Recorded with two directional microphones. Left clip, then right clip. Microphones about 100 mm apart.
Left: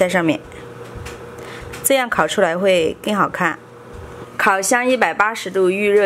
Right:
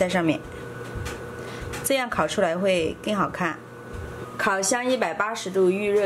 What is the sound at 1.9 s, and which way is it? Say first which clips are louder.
A woman's voice: left 8 dB; 35° left (ahead or behind).